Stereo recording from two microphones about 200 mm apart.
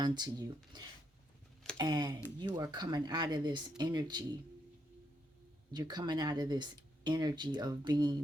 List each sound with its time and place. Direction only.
0.0 s speech: 20° right (ahead or behind)
5.7 s speech: 20° right (ahead or behind)